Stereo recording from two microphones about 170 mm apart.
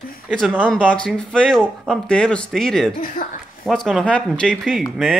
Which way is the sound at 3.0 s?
50° left (ahead or behind).